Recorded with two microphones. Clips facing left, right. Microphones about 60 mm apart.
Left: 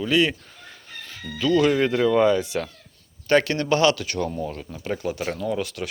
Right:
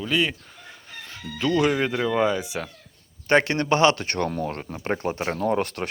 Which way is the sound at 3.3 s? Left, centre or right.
Right.